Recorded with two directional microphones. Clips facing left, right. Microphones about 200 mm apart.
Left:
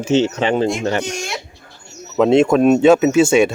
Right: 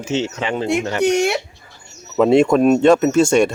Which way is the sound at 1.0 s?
65° right (ahead or behind).